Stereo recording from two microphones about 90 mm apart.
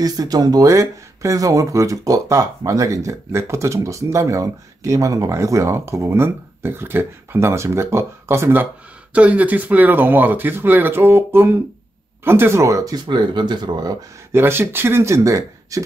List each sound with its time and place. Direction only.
0.0 s speech: 45° right (ahead or behind); by 8.6 s 25° right (ahead or behind)
9.1 s speech: 15° right (ahead or behind); by 13.0 s 40° right (ahead or behind)
13.0 s speech: 60° right (ahead or behind)
14.3 s speech: 25° right (ahead or behind)